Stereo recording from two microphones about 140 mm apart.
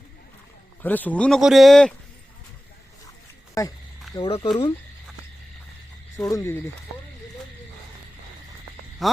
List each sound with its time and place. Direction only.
0.8 s speech: 10° left (ahead or behind)
3.6 s speech: 25° left (ahead or behind)
4.3 s speech: 45° left (ahead or behind)
6.1 s speech: 25° left (ahead or behind)
9.0 s speech: centre (ahead or behind)